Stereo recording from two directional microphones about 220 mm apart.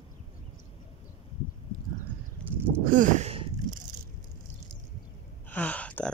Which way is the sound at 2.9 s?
35° right (ahead or behind).